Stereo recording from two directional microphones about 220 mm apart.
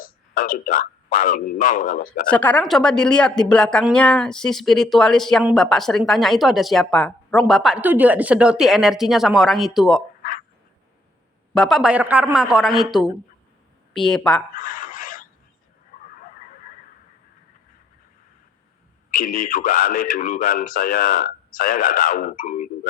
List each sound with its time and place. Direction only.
0.0 s speech: 40° left (ahead or behind)
2.3 s speech: 5° left (ahead or behind)
11.5 s speech: centre (ahead or behind)
14.5 s a sound: 40° left (ahead or behind)
19.1 s speech: 40° left (ahead or behind)